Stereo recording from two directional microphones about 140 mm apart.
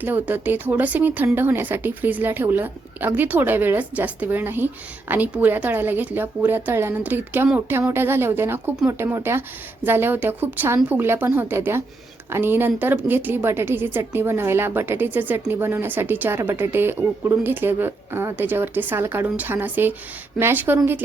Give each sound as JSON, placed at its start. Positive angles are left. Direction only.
{"t": 0.0, "sound": "speech", "side_deg": -10}